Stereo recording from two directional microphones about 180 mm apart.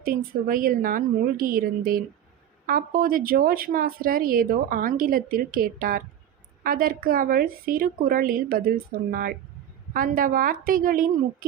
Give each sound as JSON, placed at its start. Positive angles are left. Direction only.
{"t": 0.0, "sound": "speech", "side_deg": -55}